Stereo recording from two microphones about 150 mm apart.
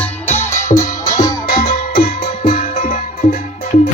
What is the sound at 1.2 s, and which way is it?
Music, 30° left (ahead or behind).